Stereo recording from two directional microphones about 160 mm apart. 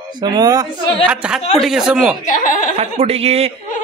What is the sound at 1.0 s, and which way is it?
Speech, 5° right (ahead or behind).